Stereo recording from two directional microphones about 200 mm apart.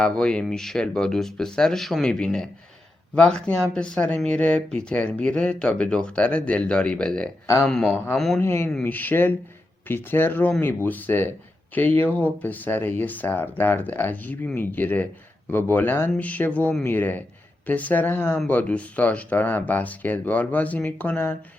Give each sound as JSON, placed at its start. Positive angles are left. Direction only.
{"t": 0.0, "sound": "speech", "side_deg": 5}